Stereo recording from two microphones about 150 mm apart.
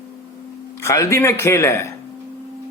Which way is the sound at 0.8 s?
20° left (ahead or behind).